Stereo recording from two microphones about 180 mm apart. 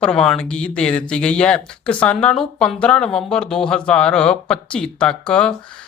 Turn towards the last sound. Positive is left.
turn(degrees=5)  # may be behind; listen again after turning